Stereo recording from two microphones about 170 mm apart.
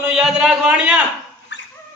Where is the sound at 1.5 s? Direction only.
90° left.